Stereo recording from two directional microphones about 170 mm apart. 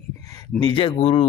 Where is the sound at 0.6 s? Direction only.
30° left (ahead or behind).